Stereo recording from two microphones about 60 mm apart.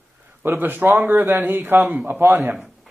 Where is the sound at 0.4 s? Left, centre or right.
Right.